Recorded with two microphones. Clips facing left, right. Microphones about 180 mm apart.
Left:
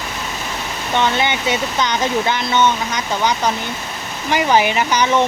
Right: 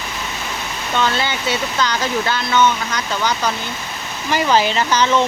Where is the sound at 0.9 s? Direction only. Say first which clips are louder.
Left 2 dB; 15° left (ahead or behind).